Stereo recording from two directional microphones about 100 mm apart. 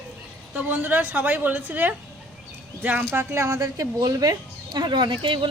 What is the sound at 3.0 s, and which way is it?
Speech, 25° right (ahead or behind).